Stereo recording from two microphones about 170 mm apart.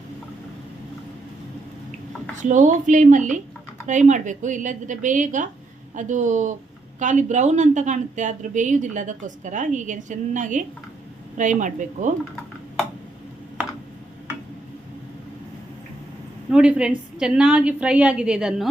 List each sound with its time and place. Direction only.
2.3 s a woman's voice: 45° right (ahead or behind)
16.5 s a woman's voice: 5° right (ahead or behind)